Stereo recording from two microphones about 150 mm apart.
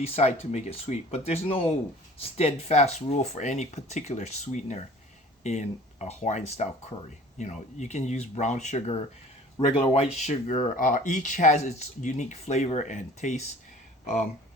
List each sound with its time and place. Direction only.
0.0 s speech: 45° left (ahead or behind)
10.8 s speech: 60° left (ahead or behind)